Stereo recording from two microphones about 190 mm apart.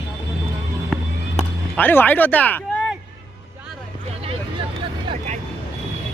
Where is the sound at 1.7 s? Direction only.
10° left (ahead or behind).